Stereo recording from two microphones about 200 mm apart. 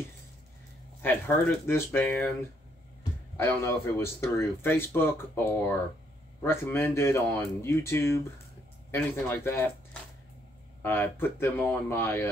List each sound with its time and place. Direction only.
1.0 s speech: 10° left (ahead or behind)
3.3 s speech: 15° left (ahead or behind)
10.8 s speech: 10° left (ahead or behind)